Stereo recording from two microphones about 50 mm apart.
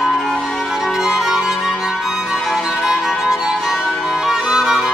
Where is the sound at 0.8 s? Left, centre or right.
Centre.